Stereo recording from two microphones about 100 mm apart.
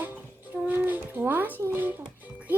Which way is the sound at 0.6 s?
20° right (ahead or behind).